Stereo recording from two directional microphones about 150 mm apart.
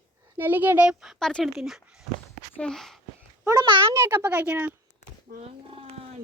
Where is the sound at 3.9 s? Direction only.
15° right (ahead or behind).